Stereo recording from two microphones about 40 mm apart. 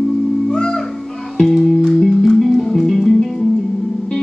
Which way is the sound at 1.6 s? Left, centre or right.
Centre.